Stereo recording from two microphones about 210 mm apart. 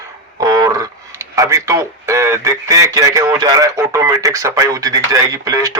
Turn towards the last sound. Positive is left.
turn(degrees=-15)  # may be behind; listen again after turning